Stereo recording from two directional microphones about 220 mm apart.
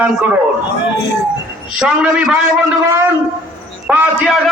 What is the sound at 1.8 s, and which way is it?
Speech, 5° right (ahead or behind).